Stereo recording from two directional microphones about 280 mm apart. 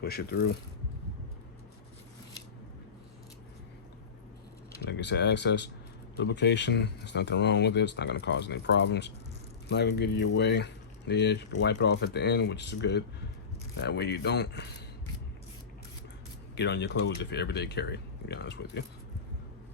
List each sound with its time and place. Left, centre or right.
0.0 s speech: left
4.9 s speech: left
16.6 s speech: left